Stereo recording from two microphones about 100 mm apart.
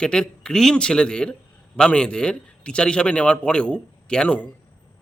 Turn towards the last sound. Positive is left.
turn(degrees=10)  # may be behind; listen again after turning